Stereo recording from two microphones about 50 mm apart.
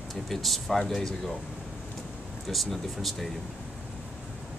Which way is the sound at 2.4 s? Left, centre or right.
Centre.